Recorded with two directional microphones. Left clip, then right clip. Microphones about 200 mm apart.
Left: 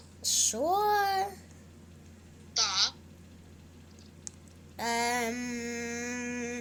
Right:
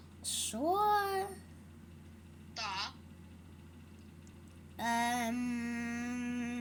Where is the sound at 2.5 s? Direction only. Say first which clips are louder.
Left 11 dB; 20° left (ahead or behind).